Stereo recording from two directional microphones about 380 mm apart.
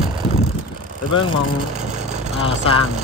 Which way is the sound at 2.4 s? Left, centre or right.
Centre.